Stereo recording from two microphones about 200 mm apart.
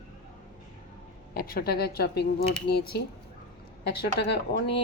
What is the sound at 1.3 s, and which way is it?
A woman's voice, 45° left (ahead or behind).